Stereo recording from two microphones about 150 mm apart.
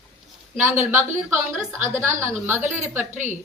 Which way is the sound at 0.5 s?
10° right (ahead or behind).